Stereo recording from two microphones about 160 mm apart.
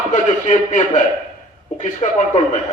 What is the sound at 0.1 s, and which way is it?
Speech, 50° left (ahead or behind).